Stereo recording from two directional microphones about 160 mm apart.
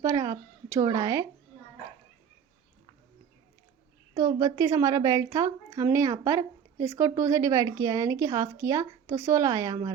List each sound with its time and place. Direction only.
0.0 s a woman's voice: 20° right (ahead or behind)
4.4 s a woman's voice: 20° right (ahead or behind)